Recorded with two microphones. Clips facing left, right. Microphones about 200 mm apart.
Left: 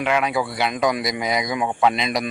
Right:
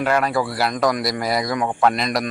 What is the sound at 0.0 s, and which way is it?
Speech, centre (ahead or behind).